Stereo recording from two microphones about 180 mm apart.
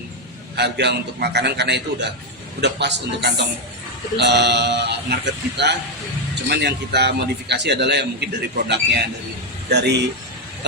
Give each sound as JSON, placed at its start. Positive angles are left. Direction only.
{"t": 0.5, "sound": "a man's voice", "side_deg": -70}